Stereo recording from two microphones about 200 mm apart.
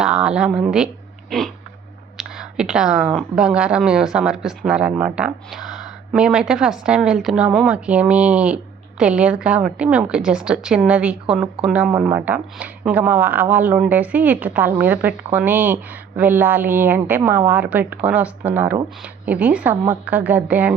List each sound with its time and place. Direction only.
0.0 s speech: 5° right (ahead or behind)